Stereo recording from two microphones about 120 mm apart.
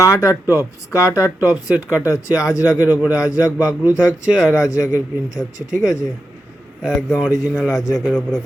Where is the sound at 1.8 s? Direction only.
25° left (ahead or behind).